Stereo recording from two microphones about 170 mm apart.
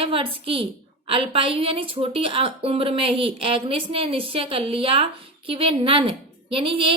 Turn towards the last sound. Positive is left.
turn(degrees=-30)  # may be behind; listen again after turning